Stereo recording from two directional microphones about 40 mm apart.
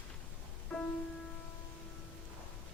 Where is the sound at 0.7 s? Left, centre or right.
Left.